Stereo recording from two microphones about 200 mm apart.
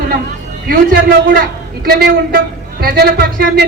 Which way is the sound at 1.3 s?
50° right (ahead or behind).